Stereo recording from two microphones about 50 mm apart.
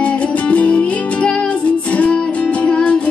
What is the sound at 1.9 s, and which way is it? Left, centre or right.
Music, left.